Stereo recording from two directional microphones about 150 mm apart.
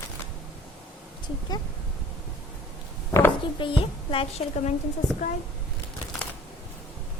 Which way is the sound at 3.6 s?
35° left (ahead or behind).